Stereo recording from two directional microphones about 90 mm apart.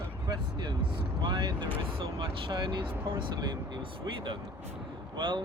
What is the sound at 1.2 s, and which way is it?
Speech, 55° right (ahead or behind).